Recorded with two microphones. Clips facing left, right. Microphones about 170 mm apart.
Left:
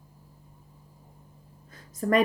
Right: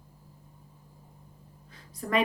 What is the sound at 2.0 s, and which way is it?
Speech, 45° left (ahead or behind).